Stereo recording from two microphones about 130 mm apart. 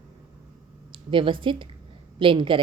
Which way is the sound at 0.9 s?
40° right (ahead or behind).